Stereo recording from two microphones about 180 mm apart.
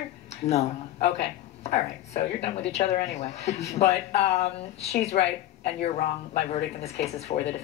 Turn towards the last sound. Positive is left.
turn(degrees=35)  # may be behind; listen again after turning